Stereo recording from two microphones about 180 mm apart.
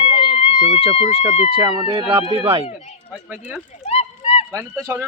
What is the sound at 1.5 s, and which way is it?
Speech, 25° right (ahead or behind).